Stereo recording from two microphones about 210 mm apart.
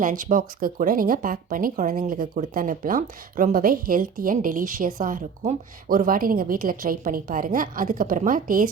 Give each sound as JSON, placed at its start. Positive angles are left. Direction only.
{"t": 0.0, "sound": "speech", "side_deg": -40}